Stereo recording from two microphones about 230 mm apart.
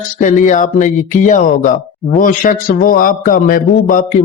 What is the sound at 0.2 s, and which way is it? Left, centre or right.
A man's voice, left.